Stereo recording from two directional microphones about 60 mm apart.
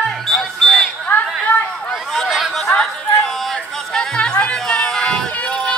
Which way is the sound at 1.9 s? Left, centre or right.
Centre.